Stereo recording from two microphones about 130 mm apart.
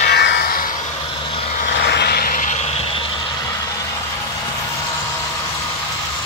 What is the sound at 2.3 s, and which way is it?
Vehicle, 85° left.